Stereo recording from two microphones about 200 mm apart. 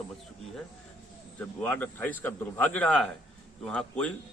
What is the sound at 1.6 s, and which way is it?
A man's voice, 5° left (ahead or behind).